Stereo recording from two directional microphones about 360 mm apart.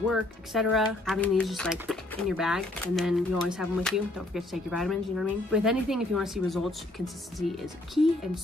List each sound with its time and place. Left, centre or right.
0.1 s speech: centre